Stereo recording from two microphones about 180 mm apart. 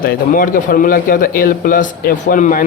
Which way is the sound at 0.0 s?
50° left (ahead or behind).